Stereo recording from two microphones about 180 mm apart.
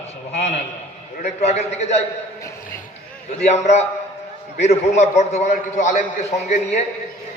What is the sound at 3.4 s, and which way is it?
A man's voice, 35° left (ahead or behind).